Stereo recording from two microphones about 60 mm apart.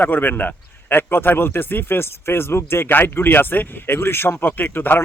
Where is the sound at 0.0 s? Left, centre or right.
Left.